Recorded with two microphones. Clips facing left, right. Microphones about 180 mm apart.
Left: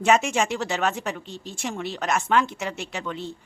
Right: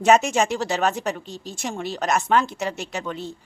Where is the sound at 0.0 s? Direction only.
40° right (ahead or behind).